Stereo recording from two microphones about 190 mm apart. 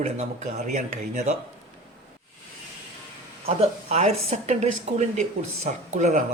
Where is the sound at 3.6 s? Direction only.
30° right (ahead or behind).